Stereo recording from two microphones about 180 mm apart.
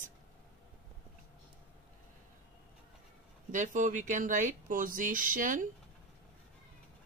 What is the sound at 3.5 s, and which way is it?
A woman's voice, 45° right (ahead or behind).